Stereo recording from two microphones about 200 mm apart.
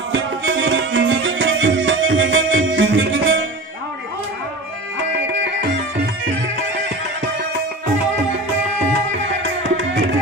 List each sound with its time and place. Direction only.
0.1 s music: 70° right (ahead or behind)
4.9 s music: 60° right (ahead or behind)
9.4 s tabla: 70° right (ahead or behind)